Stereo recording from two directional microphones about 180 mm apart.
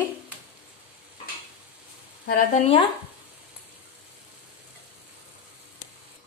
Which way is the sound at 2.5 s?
30° left (ahead or behind).